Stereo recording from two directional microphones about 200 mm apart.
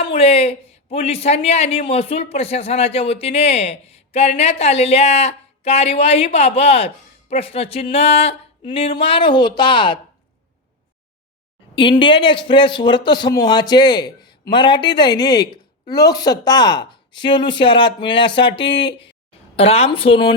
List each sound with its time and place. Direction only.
0.1 s speech: 30° left (ahead or behind)
11.7 s speech: 25° left (ahead or behind)